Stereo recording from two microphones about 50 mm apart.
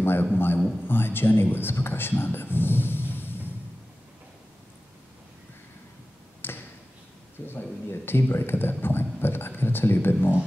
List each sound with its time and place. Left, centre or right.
0.0 s a man's voice: left
6.4 s a sound: left
7.4 s a man's voice: left